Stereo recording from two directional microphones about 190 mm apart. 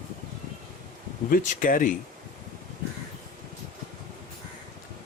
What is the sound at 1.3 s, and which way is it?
Speech, 45° left (ahead or behind).